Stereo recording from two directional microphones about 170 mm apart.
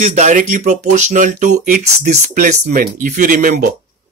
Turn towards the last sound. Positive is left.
turn(degrees=-55)  # may be behind; listen again after turning